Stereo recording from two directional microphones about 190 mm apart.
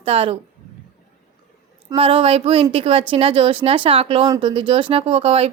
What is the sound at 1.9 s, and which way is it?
A woman's voice, 30° right (ahead or behind).